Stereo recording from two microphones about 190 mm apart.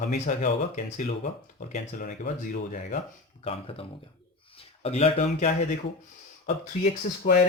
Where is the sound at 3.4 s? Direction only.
30° left (ahead or behind).